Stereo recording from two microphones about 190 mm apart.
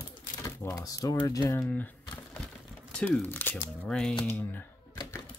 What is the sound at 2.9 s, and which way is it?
Speech, 5° left (ahead or behind).